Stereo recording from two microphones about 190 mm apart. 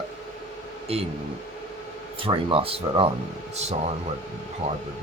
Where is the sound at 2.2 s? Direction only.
30° right (ahead or behind).